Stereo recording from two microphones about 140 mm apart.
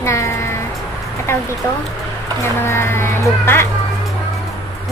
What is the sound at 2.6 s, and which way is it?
Music, 20° left (ahead or behind).